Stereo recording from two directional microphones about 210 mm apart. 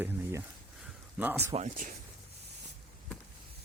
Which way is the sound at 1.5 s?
35° right (ahead or behind).